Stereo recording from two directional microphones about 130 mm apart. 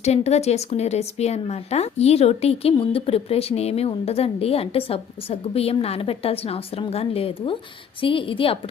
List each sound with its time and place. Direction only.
0.0 s speech: 55° left (ahead or behind)